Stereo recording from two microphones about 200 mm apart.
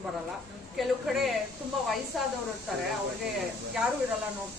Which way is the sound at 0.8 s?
Centre (ahead or behind).